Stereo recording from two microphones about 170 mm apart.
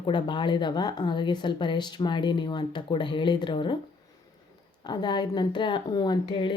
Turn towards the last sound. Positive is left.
turn(degrees=30)  # may be behind; listen again after turning